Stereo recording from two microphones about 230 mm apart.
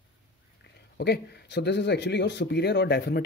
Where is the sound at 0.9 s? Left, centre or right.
Left.